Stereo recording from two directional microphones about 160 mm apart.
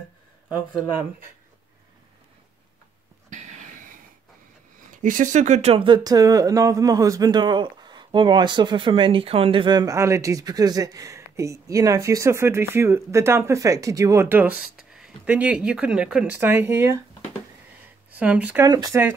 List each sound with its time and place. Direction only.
0.5 s speech: 10° right (ahead or behind)
3.3 s a sound: 50° right (ahead or behind)
4.9 s speech: 55° right (ahead or behind); by 17.0 s 15° right (ahead or behind)
18.1 s speech: 10° right (ahead or behind)
18.7 s speech: 20° right (ahead or behind)